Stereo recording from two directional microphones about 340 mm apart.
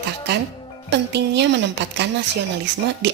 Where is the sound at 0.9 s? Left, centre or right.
Right.